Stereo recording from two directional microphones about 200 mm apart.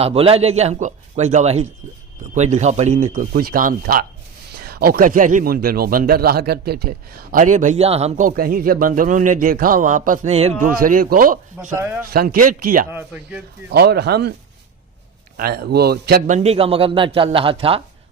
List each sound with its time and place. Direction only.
0.0 s a man's voice: 30° right (ahead or behind)
10.7 s a man's voice: 45° right (ahead or behind)
11.8 s speech: 10° right (ahead or behind)
12.1 s a man's voice: 50° right (ahead or behind)
12.9 s speech: 10° right (ahead or behind)
13.7 s speech: 55° right (ahead or behind)
15.4 s a man's voice: 50° right (ahead or behind); by 17.8 s 25° right (ahead or behind)